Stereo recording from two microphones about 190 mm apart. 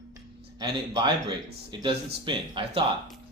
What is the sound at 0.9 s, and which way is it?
A man's voice, 25° right (ahead or behind).